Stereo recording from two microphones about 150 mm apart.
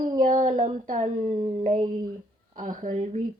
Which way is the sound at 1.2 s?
30° right (ahead or behind).